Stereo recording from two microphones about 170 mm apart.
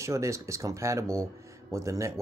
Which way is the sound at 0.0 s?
15° right (ahead or behind).